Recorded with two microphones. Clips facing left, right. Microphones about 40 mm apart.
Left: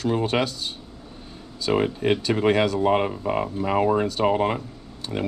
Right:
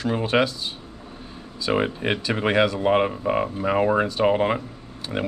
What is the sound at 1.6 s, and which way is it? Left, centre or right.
Speech, centre.